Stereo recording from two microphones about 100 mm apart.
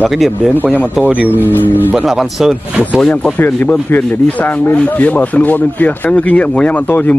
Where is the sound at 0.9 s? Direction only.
15° right (ahead or behind).